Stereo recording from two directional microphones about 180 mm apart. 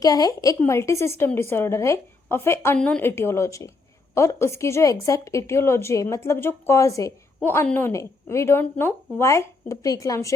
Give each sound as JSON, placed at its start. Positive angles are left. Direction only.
{"t": 0.0, "sound": "a woman's voice", "side_deg": 20}